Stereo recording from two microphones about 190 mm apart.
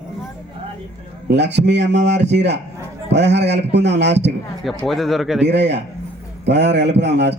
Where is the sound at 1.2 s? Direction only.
65° right (ahead or behind).